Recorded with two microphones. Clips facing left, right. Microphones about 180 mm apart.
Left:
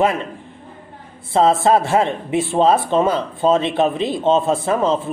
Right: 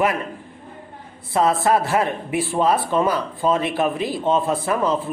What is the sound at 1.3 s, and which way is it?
Speech, 25° left (ahead or behind).